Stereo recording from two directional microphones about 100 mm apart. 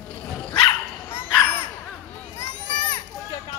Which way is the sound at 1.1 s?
20° left (ahead or behind).